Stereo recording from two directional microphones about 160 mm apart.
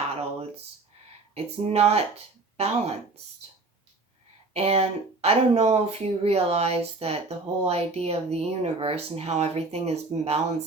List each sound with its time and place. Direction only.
0.2 s a sound: 40° right (ahead or behind)
1.5 s speech: 40° right (ahead or behind)
4.5 s speech: 40° right (ahead or behind)